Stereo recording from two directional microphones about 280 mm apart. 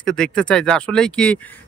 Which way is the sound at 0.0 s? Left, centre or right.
Centre.